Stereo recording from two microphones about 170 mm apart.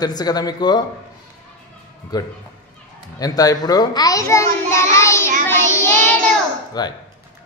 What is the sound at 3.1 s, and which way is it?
A child's voice, 20° left (ahead or behind).